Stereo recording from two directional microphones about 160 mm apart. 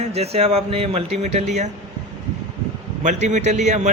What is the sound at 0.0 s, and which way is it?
Speech, 40° right (ahead or behind).